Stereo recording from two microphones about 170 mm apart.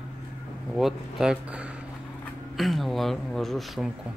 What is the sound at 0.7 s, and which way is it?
Speech, centre (ahead or behind).